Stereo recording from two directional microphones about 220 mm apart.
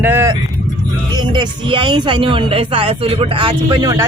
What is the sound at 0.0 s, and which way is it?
Vehicle, 10° right (ahead or behind).